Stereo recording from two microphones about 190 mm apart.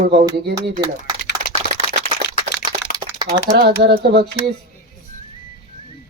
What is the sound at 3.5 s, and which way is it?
Speech, 60° right (ahead or behind).